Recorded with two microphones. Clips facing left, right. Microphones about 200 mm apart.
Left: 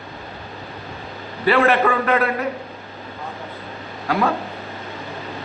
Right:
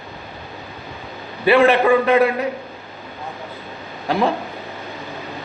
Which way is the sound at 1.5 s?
20° right (ahead or behind).